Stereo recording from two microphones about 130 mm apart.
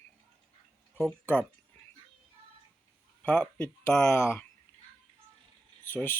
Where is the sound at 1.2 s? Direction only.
15° left (ahead or behind).